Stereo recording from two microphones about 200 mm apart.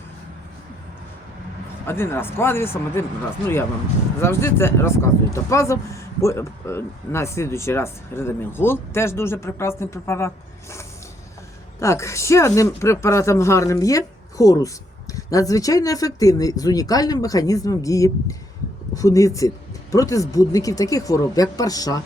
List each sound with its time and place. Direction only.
1.9 s speech: 10° left (ahead or behind)
4.2 s speech: 10° left (ahead or behind)